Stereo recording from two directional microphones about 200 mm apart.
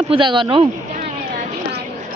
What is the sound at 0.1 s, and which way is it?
Speech, 25° right (ahead or behind).